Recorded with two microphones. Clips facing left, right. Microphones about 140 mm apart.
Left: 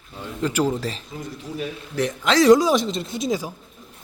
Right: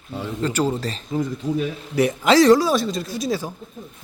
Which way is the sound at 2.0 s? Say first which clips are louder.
Right 4 dB; 10° right (ahead or behind).